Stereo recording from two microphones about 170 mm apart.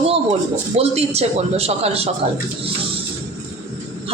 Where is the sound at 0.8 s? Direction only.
35° right (ahead or behind).